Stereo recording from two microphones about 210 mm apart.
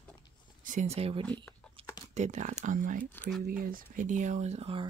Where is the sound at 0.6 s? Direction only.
40° right (ahead or behind).